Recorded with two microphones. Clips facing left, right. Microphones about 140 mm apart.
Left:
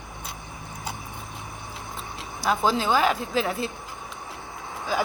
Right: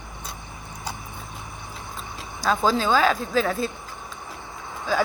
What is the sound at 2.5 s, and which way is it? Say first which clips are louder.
A woman's voice: right 2 dB; 15° left (ahead or behind).